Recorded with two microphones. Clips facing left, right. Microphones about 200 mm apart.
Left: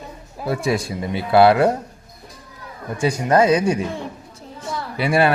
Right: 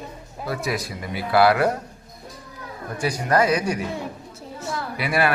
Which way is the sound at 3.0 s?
25° left (ahead or behind).